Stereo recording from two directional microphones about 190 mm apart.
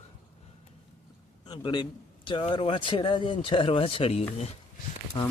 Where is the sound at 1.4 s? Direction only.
25° left (ahead or behind).